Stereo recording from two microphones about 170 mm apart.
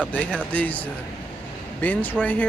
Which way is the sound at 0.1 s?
10° left (ahead or behind).